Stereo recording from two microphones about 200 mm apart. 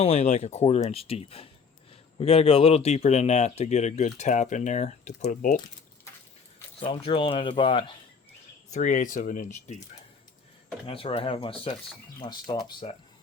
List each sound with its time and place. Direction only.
0.0 s speech: 35° left (ahead or behind)
6.7 s speech: 25° left (ahead or behind)
8.7 s speech: 40° left (ahead or behind)
10.8 s speech: 25° left (ahead or behind)